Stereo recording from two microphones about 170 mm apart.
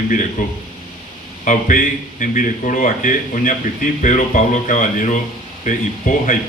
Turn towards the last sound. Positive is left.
turn(degrees=50)  # may be behind; listen again after turning